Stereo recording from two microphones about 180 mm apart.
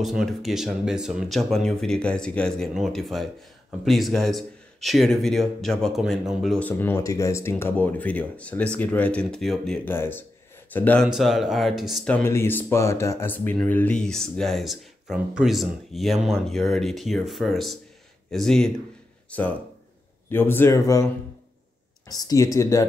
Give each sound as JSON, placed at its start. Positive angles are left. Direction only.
{"t": 0.0, "sound": "speech", "side_deg": 0}
{"t": 6.7, "sound": "speech", "side_deg": 15}
{"t": 11.1, "sound": "speech", "side_deg": 0}
{"t": 20.2, "sound": "speech", "side_deg": 10}